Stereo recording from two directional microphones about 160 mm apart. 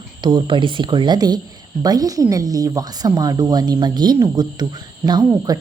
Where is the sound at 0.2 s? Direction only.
30° right (ahead or behind).